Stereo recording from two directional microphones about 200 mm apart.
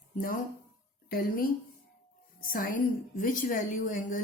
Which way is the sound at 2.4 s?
45° left (ahead or behind).